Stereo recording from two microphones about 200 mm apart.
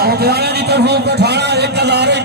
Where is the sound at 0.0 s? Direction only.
50° right (ahead or behind).